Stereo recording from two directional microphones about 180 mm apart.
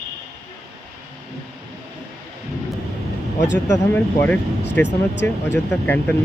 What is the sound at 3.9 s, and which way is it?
Speech, 10° left (ahead or behind).